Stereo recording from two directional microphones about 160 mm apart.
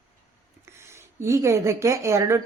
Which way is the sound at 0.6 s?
15° right (ahead or behind).